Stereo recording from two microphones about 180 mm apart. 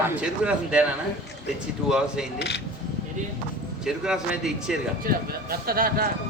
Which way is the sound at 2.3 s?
70° left (ahead or behind).